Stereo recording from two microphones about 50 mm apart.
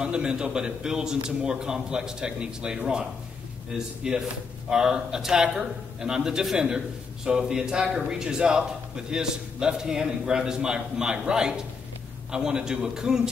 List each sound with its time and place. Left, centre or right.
0.0 s a man's voice: centre